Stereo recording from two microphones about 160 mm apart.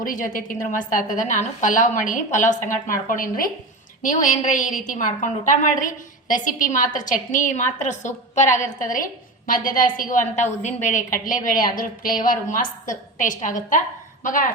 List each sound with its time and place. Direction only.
0.0 s a woman's voice: 55° left (ahead or behind)